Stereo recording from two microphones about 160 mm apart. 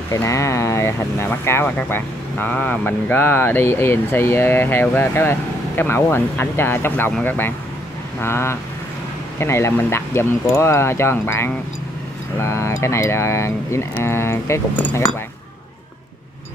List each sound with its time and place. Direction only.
0.1 s speech: 20° left (ahead or behind)